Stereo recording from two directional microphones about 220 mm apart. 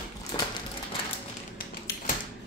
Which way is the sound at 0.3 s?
25° left (ahead or behind).